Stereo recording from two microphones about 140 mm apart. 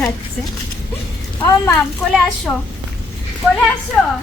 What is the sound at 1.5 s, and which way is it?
Speech, 20° left (ahead or behind).